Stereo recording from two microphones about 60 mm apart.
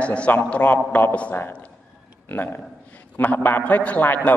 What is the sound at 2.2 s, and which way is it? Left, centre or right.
A man's voice, left.